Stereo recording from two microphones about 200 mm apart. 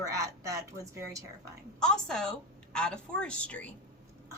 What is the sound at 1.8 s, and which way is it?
A woman's voice, 5° left (ahead or behind).